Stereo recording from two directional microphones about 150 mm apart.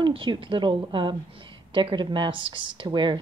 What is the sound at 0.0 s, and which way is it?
A woman's voice, 35° right (ahead or behind).